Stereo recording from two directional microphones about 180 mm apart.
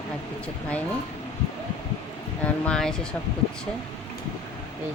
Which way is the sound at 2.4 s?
5° left (ahead or behind).